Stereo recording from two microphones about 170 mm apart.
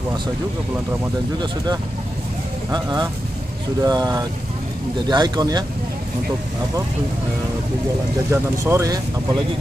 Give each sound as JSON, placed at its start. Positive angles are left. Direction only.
{"t": 2.7, "sound": "speech", "side_deg": -25}
{"t": 8.3, "sound": "speech", "side_deg": -15}